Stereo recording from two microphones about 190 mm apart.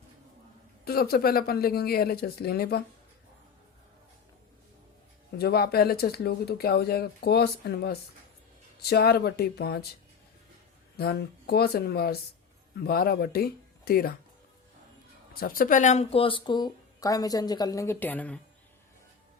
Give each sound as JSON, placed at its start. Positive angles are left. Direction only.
{"t": 0.9, "sound": "speech", "side_deg": 55}
{"t": 5.4, "sound": "speech", "side_deg": 55}
{"t": 10.9, "sound": "speech", "side_deg": 55}
{"t": 15.3, "sound": "speech", "side_deg": 50}